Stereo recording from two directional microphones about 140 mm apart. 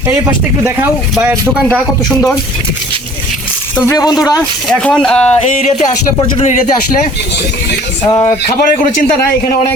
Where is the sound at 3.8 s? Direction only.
25° left (ahead or behind).